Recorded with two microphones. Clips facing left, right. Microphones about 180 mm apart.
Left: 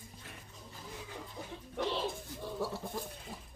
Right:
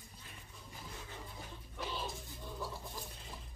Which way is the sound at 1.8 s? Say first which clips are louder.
Left 9 dB; 75° left (ahead or behind).